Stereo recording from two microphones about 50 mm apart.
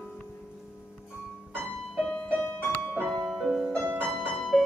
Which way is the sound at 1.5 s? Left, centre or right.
Centre.